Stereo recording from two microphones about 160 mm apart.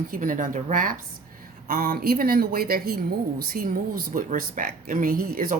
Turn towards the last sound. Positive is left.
turn(degrees=-65)  # may be behind; listen again after turning